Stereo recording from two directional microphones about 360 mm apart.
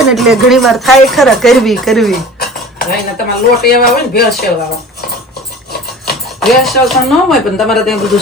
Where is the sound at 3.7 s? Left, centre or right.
Left.